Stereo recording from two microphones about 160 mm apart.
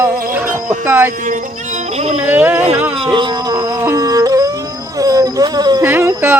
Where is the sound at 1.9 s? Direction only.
40° right (ahead or behind).